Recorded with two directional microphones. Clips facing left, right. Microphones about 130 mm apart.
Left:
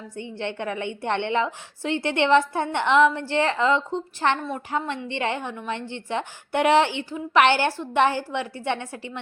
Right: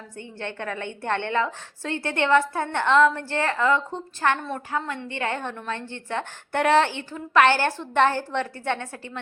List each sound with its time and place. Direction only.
0.2 s a woman's voice: 20° left (ahead or behind)